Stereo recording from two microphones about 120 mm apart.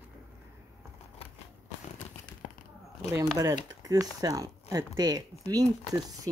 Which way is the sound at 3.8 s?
30° right (ahead or behind).